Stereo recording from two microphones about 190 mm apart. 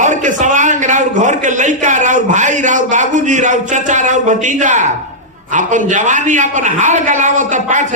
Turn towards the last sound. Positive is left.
turn(degrees=-40)  # may be behind; listen again after turning